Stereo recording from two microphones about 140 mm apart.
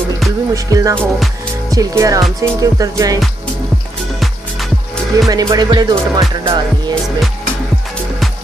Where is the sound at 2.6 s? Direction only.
25° right (ahead or behind).